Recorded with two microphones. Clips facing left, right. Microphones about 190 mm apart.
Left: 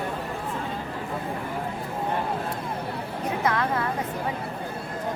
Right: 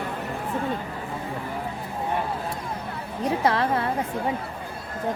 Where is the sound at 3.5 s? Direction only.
30° right (ahead or behind).